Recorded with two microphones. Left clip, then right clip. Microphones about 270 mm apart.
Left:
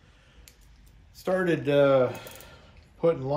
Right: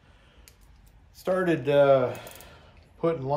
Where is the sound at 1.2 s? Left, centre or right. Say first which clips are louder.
Right 1 dB; centre.